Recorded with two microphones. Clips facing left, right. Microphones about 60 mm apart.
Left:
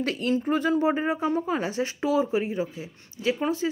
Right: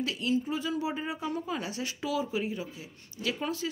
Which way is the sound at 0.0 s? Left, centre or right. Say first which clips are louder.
Left 4 dB; left.